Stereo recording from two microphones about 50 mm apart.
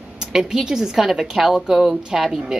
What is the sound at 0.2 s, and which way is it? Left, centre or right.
Speech, centre.